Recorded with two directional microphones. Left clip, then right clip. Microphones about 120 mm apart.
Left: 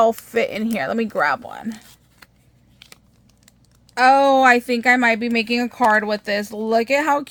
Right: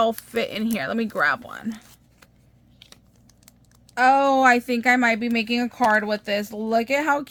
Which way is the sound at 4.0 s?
30° left (ahead or behind).